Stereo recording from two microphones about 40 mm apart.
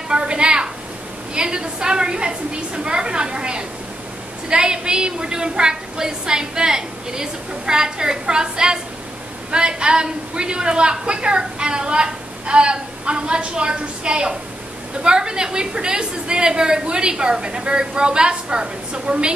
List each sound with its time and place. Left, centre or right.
0.1 s a woman's voice: right